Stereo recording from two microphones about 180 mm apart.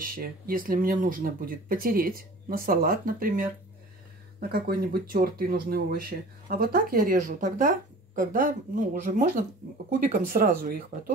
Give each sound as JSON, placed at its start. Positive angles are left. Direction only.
{"t": 0.0, "sound": "speech", "side_deg": -50}